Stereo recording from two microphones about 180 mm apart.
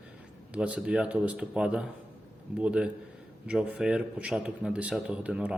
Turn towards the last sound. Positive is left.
turn(degrees=-5)  # may be behind; listen again after turning